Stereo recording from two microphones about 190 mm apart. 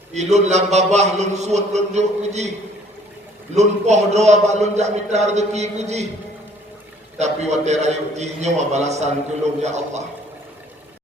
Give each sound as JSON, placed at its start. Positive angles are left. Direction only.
{"t": 0.1, "sound": "a man's voice", "side_deg": -35}
{"t": 3.5, "sound": "a man's voice", "side_deg": -35}
{"t": 7.2, "sound": "a man's voice", "side_deg": -35}